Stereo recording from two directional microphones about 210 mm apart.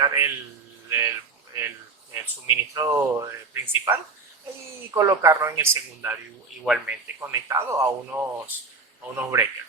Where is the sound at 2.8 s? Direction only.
15° right (ahead or behind).